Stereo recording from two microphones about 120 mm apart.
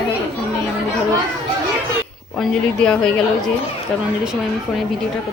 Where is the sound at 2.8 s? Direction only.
5° left (ahead or behind).